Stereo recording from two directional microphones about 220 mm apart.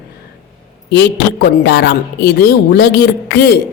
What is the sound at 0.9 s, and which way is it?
Speech, 50° left (ahead or behind).